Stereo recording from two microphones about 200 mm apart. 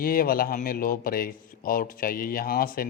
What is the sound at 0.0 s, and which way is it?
Speech, 50° left (ahead or behind).